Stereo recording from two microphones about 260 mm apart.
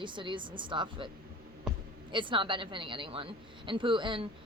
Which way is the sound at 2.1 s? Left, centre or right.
Centre.